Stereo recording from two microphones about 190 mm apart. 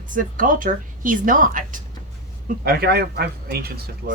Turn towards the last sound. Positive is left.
turn(degrees=-55)  # may be behind; listen again after turning